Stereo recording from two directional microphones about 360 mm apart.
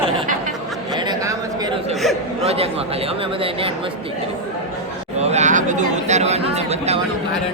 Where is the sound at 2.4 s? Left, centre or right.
Centre.